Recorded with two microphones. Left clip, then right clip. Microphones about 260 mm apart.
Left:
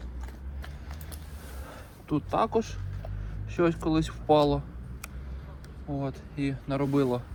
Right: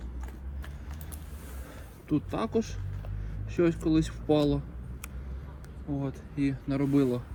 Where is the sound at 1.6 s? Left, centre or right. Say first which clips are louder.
Right 1 dB; centre.